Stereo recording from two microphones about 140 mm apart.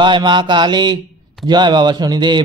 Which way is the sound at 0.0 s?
35° right (ahead or behind).